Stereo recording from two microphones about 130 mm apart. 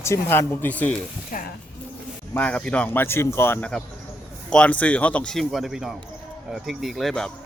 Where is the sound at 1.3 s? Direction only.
90° left.